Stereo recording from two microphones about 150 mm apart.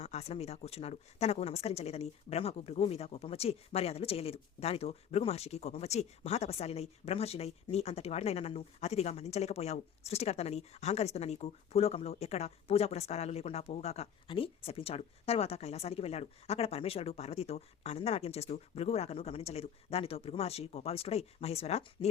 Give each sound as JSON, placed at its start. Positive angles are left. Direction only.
{"t": 0.0, "sound": "speech", "side_deg": 45}